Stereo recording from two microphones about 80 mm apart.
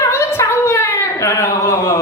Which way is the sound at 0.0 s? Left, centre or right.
Left.